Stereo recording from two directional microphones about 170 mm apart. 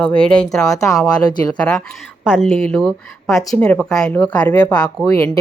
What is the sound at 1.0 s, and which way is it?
Speech, 25° left (ahead or behind).